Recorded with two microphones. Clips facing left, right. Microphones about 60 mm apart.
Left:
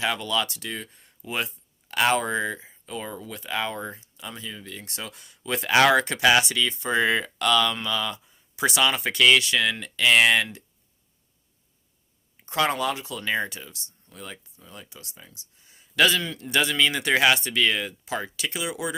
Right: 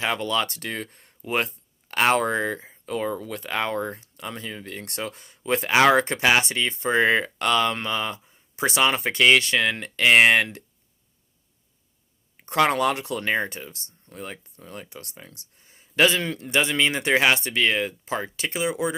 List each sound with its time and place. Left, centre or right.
0.0 s speech: right
12.4 s speech: right